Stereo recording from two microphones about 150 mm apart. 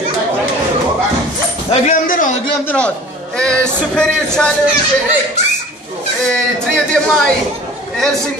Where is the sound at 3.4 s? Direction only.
5° left (ahead or behind).